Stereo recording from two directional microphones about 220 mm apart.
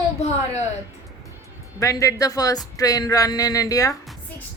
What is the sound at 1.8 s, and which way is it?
Speech, 15° left (ahead or behind).